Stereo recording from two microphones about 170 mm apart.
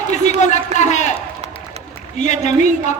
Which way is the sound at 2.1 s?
45° left (ahead or behind).